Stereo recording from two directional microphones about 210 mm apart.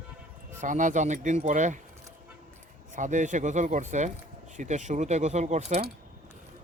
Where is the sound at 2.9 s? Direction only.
35° right (ahead or behind).